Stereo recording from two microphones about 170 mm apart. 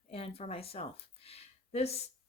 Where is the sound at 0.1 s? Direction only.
35° left (ahead or behind).